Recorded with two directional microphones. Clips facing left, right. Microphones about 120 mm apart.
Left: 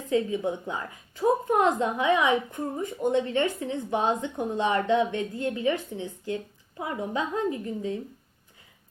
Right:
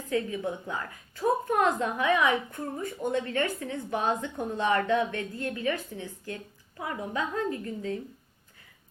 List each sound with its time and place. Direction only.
0.1 s a woman's voice: 20° left (ahead or behind)